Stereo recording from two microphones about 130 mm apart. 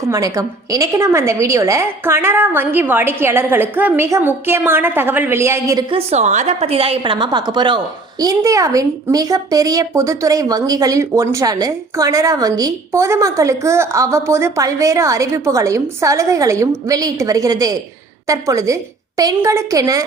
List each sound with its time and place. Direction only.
0.1 s a woman's voice: 25° right (ahead or behind)
5.9 s a woman's voice: 55° right (ahead or behind); by 20.1 s 25° right (ahead or behind)